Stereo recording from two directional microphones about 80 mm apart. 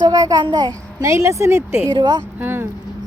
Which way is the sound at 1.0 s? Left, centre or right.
Right.